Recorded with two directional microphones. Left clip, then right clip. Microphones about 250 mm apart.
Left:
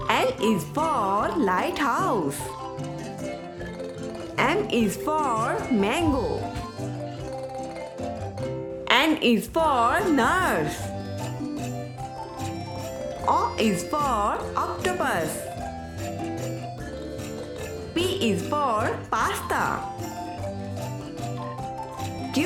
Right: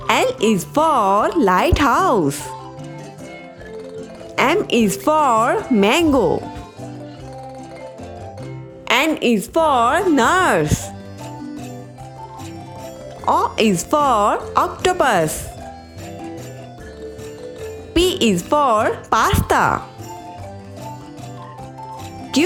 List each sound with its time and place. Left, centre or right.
0.1 s speech: right
4.4 s speech: right
8.9 s speech: centre
13.2 s speech: right
17.9 s speech: right